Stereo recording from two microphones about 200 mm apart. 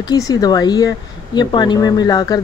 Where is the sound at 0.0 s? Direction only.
20° left (ahead or behind).